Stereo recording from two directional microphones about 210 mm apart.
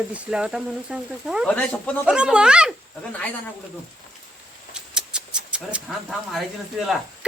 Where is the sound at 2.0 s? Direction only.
5° right (ahead or behind).